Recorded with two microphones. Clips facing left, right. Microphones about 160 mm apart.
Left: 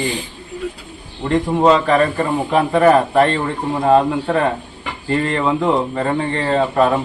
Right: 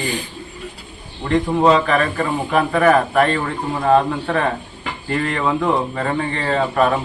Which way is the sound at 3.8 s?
20° left (ahead or behind).